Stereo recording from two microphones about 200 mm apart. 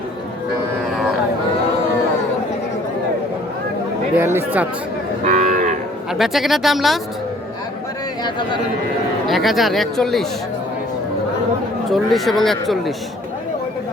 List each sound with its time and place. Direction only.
4.2 s speech: 10° right (ahead or behind)
5.2 s cattle: 35° right (ahead or behind)
6.1 s speech: centre (ahead or behind)
9.2 s speech: centre (ahead or behind)
11.9 s speech: centre (ahead or behind)